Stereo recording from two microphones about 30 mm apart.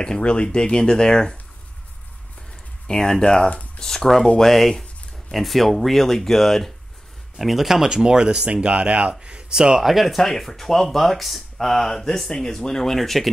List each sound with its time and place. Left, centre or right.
0.2 s speech: left
2.9 s speech: centre
3.4 s speech: left
3.8 s speech: centre
7.3 s speech: centre; by 9.1 s right
9.5 s speech: right
9.8 s speech: centre